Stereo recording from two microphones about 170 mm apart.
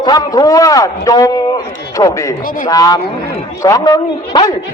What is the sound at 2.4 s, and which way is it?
Speech, 55° left (ahead or behind).